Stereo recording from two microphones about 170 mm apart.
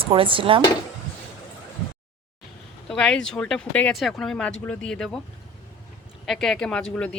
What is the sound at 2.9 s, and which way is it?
Speech, 5° left (ahead or behind).